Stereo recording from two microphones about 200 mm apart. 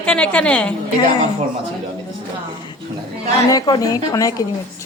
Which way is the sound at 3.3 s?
20° left (ahead or behind).